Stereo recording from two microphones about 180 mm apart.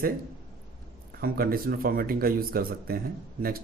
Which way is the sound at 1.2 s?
55° right (ahead or behind).